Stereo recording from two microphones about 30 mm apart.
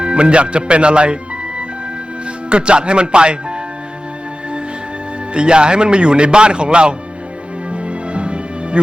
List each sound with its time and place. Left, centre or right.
0.0 s a man's voice: right
5.3 s a man's voice: right
7.7 s music: right